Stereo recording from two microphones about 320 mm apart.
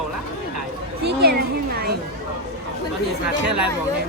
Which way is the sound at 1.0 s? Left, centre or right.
Right.